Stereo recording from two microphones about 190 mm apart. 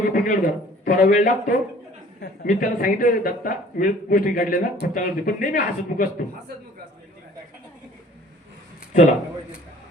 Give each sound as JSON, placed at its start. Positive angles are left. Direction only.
{"t": 0.1, "sound": "a man's voice", "side_deg": 45}